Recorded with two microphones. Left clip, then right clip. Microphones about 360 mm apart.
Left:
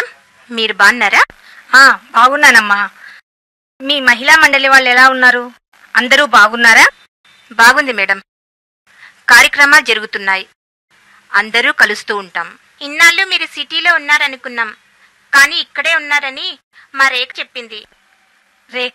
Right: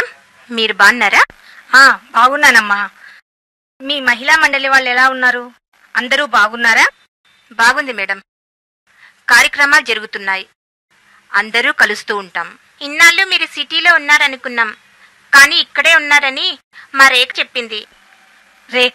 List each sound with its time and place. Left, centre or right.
0.0 s a woman's voice: centre; by 3.3 s left
3.7 s a woman's voice: left
9.0 s a woman's voice: left
11.2 s a woman's voice: left; by 14.8 s centre
15.2 s a woman's voice: right
18.7 s a woman's voice: right